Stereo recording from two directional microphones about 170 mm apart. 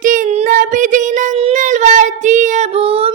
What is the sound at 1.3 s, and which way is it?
Child singing, 40° right (ahead or behind).